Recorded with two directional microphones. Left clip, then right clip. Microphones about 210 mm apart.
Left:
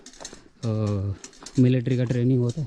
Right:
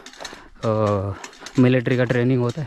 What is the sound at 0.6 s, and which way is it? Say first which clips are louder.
Speech: right 10 dB; 15° left (ahead or behind).